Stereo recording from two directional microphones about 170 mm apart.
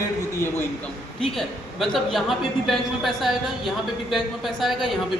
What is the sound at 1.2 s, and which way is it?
A man's voice, centre (ahead or behind).